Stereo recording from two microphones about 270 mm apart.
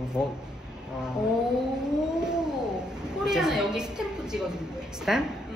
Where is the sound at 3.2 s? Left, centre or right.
Centre.